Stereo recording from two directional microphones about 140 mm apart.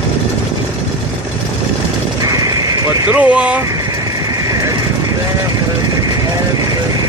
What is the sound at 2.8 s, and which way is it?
Vehicle, 25° right (ahead or behind).